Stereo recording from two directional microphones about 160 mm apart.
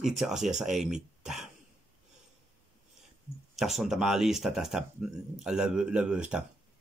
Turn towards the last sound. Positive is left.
turn(degrees=-5)  # may be behind; listen again after turning